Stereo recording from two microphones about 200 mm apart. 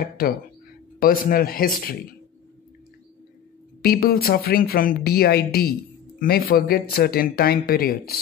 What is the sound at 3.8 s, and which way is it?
Speech, 50° left (ahead or behind).